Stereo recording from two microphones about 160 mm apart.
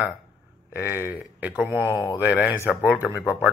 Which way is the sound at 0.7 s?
20° left (ahead or behind).